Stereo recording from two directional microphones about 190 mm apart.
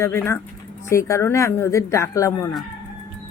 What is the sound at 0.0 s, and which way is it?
Speech, 15° left (ahead or behind).